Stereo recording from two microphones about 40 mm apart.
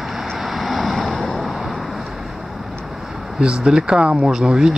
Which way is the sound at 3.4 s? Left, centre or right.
Right.